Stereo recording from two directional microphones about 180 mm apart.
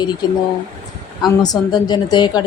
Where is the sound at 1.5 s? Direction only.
20° left (ahead or behind).